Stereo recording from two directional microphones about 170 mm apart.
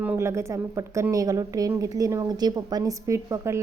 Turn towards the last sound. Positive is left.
turn(degrees=-15)  # may be behind; listen again after turning